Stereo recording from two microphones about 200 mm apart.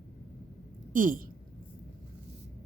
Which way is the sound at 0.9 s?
45° right (ahead or behind).